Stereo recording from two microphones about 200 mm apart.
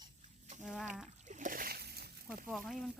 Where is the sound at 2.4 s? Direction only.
Centre (ahead or behind).